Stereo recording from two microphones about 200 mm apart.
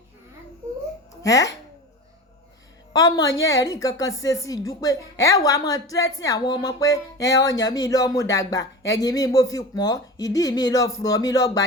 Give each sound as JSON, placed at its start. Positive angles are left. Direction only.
{"t": 1.2, "sound": "speech", "side_deg": 15}
{"t": 2.9, "sound": "speech", "side_deg": 20}